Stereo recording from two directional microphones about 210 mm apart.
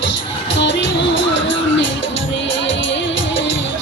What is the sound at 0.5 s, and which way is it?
Music, 60° left (ahead or behind).